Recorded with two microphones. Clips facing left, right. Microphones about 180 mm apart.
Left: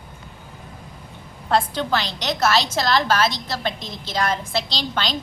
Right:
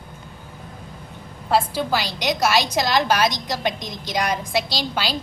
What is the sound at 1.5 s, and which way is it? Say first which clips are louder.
A woman's voice: even; 10° right (ahead or behind).